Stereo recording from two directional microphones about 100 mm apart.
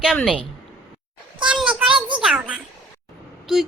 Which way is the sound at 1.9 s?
55° right (ahead or behind).